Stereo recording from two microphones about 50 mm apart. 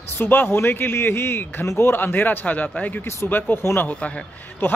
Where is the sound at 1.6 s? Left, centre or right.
Left.